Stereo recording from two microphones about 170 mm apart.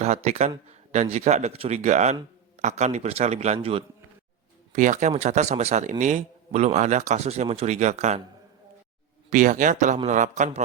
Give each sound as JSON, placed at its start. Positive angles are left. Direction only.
{"t": 0.0, "sound": "a man's voice", "side_deg": -40}
{"t": 4.7, "sound": "a man's voice", "side_deg": -45}
{"t": 9.3, "sound": "speech", "side_deg": -50}